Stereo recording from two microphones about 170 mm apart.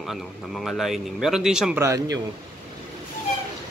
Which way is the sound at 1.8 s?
20° right (ahead or behind).